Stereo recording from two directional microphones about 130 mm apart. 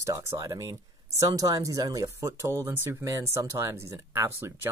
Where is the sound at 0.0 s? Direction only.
25° right (ahead or behind).